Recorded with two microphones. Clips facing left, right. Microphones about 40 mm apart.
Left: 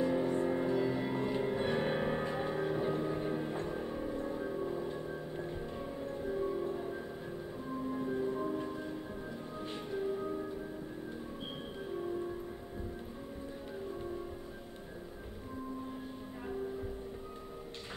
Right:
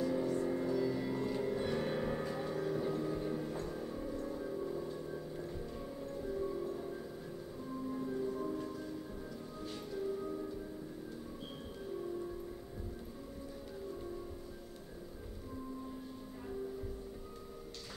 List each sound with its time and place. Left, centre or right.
0.0 s music: left